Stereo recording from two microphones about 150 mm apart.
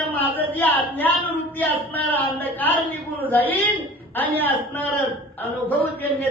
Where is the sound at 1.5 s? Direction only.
10° left (ahead or behind).